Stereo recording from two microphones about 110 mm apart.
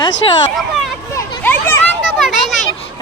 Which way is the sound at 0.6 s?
Centre (ahead or behind).